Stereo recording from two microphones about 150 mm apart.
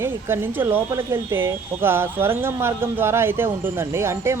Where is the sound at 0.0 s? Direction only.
15° right (ahead or behind).